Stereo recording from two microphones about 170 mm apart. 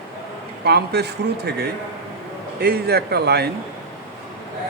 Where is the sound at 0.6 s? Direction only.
75° right (ahead or behind).